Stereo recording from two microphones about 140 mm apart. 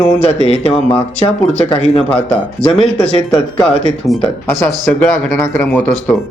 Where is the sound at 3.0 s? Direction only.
5° left (ahead or behind).